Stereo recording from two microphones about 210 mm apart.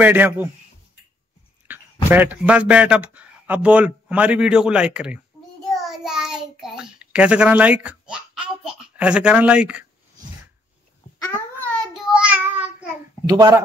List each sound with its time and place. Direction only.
0.0 s a man's voice: 10° right (ahead or behind)
1.7 s a man's voice: 10° right (ahead or behind)
5.7 s child singing: centre (ahead or behind)
6.6 s speech: 5° right (ahead or behind)
11.3 s a sound: 10° left (ahead or behind)
12.0 s child singing: 5° right (ahead or behind)
13.3 s a man's voice: 15° right (ahead or behind)